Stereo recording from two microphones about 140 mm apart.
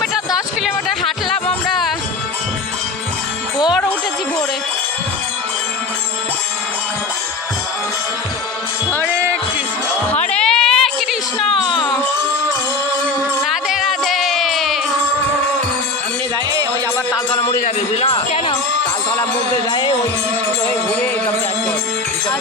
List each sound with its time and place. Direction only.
0.0 s music: centre (ahead or behind)
10.1 s a sound: 10° left (ahead or behind)
13.4 s music: 5° right (ahead or behind)
18.0 s music: 45° left (ahead or behind)